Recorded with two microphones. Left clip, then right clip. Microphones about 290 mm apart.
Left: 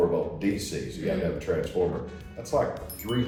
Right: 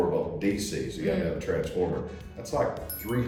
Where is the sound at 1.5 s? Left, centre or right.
Centre.